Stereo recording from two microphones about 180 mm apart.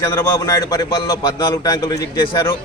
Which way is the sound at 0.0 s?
15° left (ahead or behind).